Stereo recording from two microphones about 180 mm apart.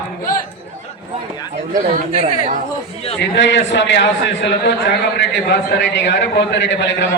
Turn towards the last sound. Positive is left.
turn(degrees=85)